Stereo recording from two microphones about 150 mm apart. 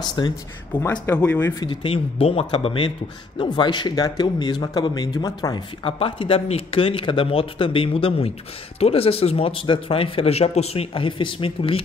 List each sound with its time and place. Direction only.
0.2 s speech: 30° left (ahead or behind)
1.0 s speech: 10° left (ahead or behind)
1.6 s speech: 35° left (ahead or behind)